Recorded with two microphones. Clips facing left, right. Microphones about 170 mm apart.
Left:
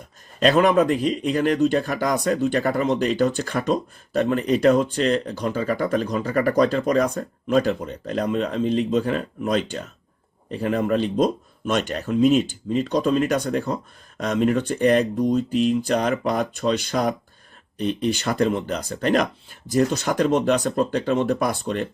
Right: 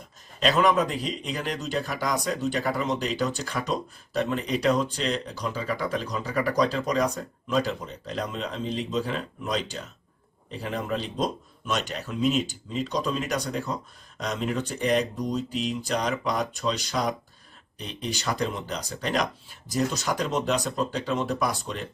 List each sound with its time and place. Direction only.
0.4 s speech: 55° left (ahead or behind)